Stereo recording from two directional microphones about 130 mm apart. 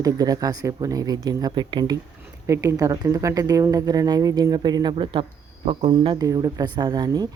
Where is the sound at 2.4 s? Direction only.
25° right (ahead or behind); by 5.2 s 40° right (ahead or behind).